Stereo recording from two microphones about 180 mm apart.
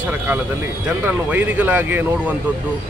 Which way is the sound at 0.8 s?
10° right (ahead or behind).